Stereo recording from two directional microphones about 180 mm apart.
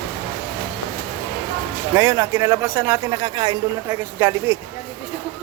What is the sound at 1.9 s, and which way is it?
Speech, 15° right (ahead or behind).